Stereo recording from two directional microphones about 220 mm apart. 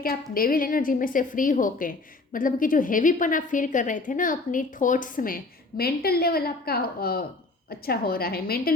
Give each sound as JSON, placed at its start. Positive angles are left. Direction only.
{"t": 0.0, "sound": "a woman's voice", "side_deg": 40}